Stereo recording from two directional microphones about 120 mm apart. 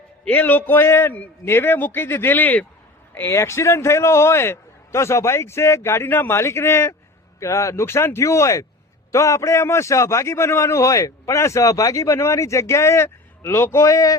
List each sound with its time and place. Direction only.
0.3 s a man's voice: 15° left (ahead or behind)